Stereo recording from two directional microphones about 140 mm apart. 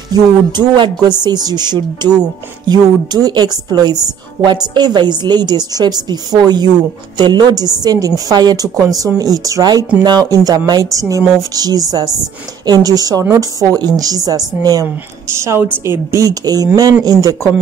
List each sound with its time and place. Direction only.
0.1 s music: 30° right (ahead or behind)
1.2 s a woman's voice: 30° right (ahead or behind)